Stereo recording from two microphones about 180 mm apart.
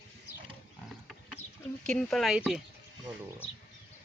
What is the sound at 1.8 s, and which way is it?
Speech, 5° left (ahead or behind).